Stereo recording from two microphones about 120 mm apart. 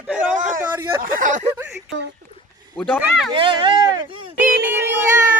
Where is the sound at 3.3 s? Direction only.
45° right (ahead or behind).